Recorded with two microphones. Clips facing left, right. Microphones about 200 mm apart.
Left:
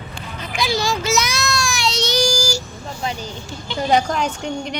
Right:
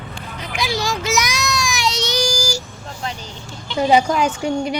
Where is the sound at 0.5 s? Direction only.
15° right (ahead or behind).